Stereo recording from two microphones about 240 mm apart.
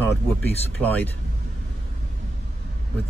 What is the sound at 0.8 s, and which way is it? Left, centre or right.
Speech, centre.